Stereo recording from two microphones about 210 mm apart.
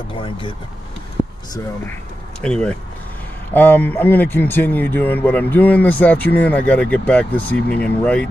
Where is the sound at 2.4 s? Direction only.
5° left (ahead or behind).